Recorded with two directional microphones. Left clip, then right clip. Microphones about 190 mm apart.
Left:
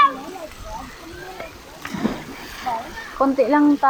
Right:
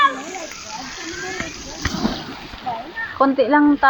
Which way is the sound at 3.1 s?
Centre (ahead or behind).